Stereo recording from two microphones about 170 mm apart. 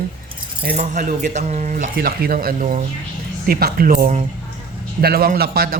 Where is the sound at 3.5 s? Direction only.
60° right (ahead or behind).